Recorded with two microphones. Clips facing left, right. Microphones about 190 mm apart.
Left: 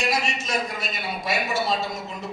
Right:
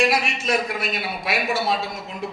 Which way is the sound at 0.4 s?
60° right (ahead or behind).